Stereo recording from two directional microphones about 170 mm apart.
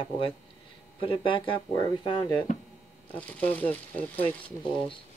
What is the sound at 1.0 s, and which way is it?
Speech, 30° left (ahead or behind).